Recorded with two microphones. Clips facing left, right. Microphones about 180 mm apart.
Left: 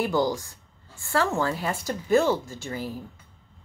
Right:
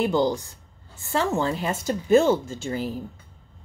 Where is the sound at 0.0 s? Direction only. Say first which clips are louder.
Right 2 dB; 20° right (ahead or behind).